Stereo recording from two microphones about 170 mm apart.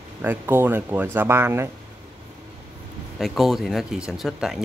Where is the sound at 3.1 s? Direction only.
Centre (ahead or behind).